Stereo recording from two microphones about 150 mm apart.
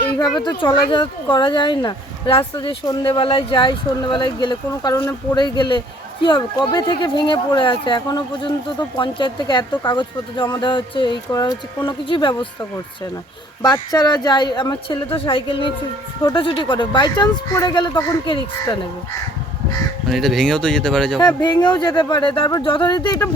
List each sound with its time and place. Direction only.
0.2 s speech: 30° left (ahead or behind)
13.7 s speech: 25° left (ahead or behind)
20.1 s speech: centre (ahead or behind)
21.2 s speech: 30° left (ahead or behind)